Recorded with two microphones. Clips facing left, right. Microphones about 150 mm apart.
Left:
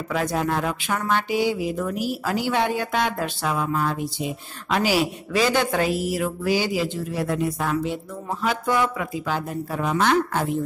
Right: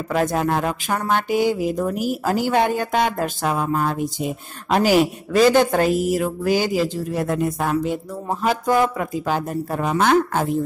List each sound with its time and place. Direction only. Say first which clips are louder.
0.1 s speech: right 4 dB; 50° right (ahead or behind)